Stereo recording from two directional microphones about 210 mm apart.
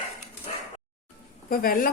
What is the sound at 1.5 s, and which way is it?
Speech, 45° left (ahead or behind).